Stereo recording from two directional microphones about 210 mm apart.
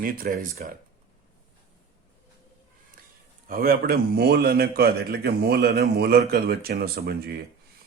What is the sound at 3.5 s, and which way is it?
Speech, 45° right (ahead or behind).